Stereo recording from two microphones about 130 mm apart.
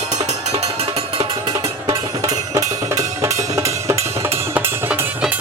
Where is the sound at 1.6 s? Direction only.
30° right (ahead or behind).